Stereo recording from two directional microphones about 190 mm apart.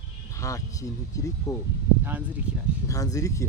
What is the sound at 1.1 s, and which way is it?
Speech, 15° left (ahead or behind).